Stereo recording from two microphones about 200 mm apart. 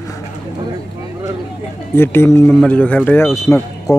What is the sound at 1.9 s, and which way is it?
Speech, 10° left (ahead or behind).